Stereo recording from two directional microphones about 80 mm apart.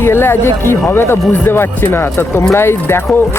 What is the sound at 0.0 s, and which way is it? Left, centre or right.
Speech, left.